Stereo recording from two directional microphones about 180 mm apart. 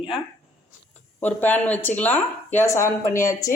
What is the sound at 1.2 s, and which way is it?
Speech, 10° left (ahead or behind).